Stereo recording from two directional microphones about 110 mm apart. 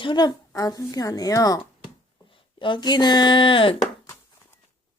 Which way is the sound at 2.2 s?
50° left (ahead or behind).